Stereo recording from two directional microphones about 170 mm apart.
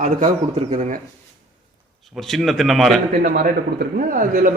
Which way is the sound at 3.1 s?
55° right (ahead or behind).